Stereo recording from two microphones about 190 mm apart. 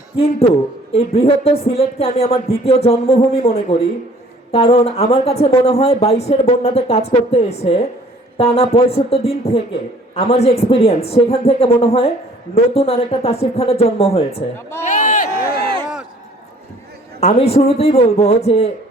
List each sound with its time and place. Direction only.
0.9 s speech: 30° left (ahead or behind)
14.8 s a sound: 40° left (ahead or behind)
17.2 s speech: 35° left (ahead or behind)